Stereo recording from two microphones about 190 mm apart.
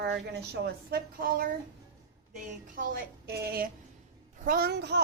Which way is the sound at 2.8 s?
45° right (ahead or behind).